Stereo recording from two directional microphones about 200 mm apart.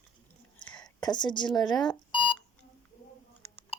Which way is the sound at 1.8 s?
25° left (ahead or behind).